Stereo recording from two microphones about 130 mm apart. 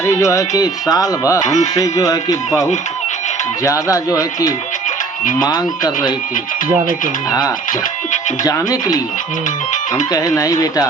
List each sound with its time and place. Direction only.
0.0 s speech: 25° left (ahead or behind)
1.5 s speech: 65° left (ahead or behind)
1.7 s speech: 25° left (ahead or behind)
3.6 s speech: 25° left (ahead or behind)
7.3 s speech: 30° left (ahead or behind)
10.1 s speech: 30° left (ahead or behind)